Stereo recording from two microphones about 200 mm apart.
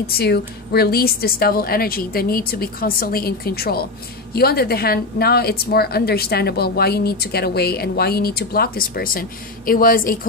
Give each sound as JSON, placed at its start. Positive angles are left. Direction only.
{"t": 0.0, "sound": "a woman's voice", "side_deg": 50}